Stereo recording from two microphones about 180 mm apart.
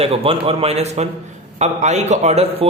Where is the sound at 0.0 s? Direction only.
35° right (ahead or behind).